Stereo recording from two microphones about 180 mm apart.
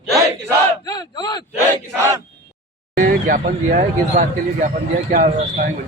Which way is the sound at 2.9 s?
50° right (ahead or behind).